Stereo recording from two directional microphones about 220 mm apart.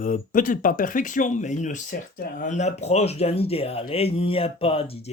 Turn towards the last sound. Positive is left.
turn(degrees=25)  # may be behind; listen again after turning